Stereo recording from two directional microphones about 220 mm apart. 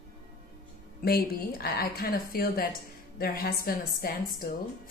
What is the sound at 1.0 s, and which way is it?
Speech, 45° left (ahead or behind).